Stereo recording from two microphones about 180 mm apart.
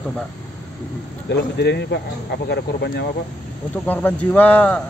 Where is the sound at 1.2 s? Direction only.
70° left (ahead or behind).